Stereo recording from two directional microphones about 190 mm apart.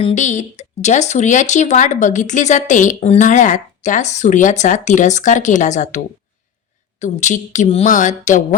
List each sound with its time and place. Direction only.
0.0 s speech: 40° left (ahead or behind)
7.0 s speech: 40° left (ahead or behind)